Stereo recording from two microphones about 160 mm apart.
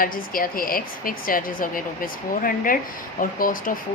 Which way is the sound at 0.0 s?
60° left (ahead or behind).